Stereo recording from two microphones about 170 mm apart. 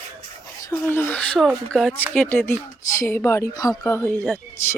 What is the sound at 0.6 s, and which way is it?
Speech, 15° left (ahead or behind).